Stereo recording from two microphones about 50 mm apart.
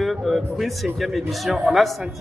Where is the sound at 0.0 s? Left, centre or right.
Centre.